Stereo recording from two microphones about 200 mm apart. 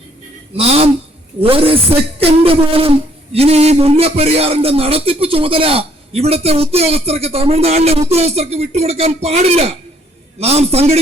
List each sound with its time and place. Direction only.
0.5 s speech: 30° right (ahead or behind)